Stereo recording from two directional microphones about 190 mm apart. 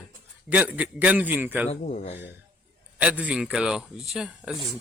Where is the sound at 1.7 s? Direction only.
35° left (ahead or behind).